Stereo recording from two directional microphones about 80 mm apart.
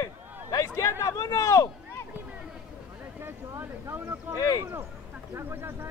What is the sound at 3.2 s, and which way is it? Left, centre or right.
Speech, right.